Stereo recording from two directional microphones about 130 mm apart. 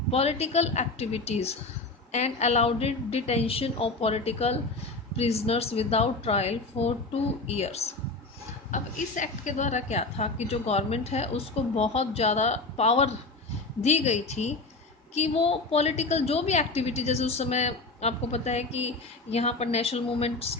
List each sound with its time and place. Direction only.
0.1 s a woman's voice: 50° left (ahead or behind)
8.7 s a woman's voice: 75° left (ahead or behind); by 20.6 s 50° left (ahead or behind)